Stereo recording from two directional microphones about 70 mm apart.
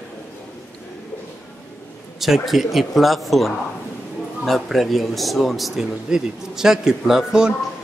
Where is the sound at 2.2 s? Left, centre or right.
Centre.